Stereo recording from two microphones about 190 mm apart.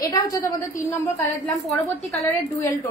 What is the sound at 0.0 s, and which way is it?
Speech, 20° left (ahead or behind).